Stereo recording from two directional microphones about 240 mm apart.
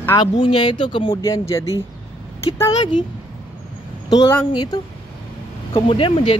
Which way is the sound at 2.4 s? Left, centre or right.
Left.